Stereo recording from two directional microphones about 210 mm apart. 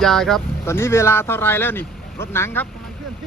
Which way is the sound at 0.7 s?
10° left (ahead or behind).